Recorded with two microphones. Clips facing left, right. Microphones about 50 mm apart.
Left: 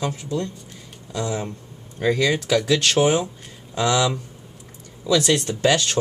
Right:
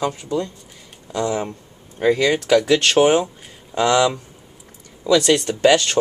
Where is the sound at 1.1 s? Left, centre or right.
Right.